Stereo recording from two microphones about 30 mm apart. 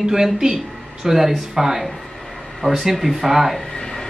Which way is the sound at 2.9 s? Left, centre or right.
Centre.